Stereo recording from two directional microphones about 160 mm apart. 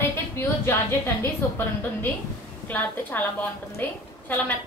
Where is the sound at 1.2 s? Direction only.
15° left (ahead or behind).